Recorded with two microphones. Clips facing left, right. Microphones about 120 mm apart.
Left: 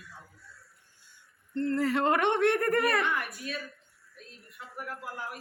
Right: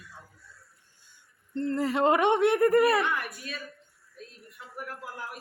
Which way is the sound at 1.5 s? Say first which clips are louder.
Even; 20° right (ahead or behind).